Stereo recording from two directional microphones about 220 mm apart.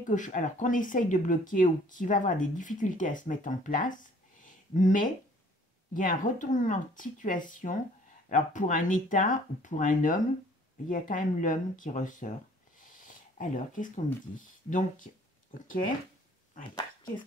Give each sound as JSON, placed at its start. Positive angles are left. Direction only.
{"t": 0.0, "sound": "speech", "side_deg": 35}